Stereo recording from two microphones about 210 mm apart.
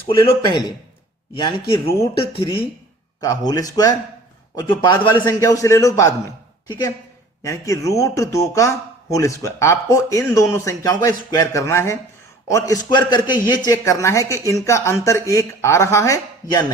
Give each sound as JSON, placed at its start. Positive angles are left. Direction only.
{"t": 0.1, "sound": "speech", "side_deg": 20}
{"t": 3.2, "sound": "a man's voice", "side_deg": 15}
{"t": 7.4, "sound": "a man's voice", "side_deg": 15}